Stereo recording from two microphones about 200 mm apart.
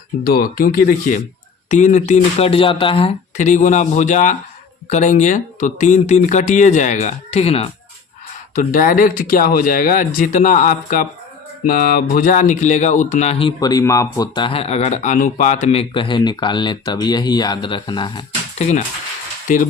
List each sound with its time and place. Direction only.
0.3 s speech: 45° left (ahead or behind); by 7.7 s 30° left (ahead or behind)
8.5 s speech: 45° left (ahead or behind)
13.6 s speech: 20° left (ahead or behind); by 19.6 s 40° left (ahead or behind)